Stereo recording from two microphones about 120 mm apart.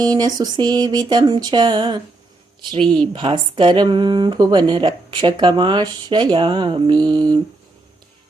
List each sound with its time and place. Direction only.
0.0 s a woman's voice: 35° right (ahead or behind)